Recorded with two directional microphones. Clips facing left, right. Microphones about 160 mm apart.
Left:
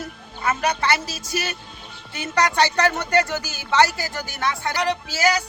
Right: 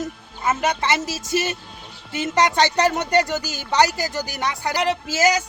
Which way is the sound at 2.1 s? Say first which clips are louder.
Right 2 dB; 20° right (ahead or behind).